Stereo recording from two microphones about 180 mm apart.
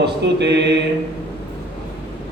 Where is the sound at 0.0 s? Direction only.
70° right (ahead or behind).